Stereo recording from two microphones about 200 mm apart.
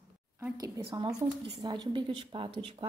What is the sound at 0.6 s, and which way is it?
A woman's voice, 20° right (ahead or behind).